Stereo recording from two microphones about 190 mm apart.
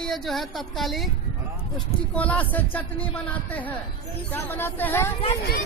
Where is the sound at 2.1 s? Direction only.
10° left (ahead or behind).